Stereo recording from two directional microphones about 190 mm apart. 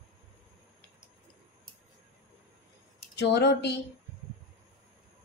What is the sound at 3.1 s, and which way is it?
Speech, 65° left (ahead or behind).